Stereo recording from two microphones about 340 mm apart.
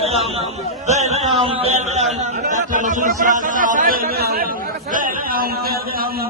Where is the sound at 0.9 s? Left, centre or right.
Centre.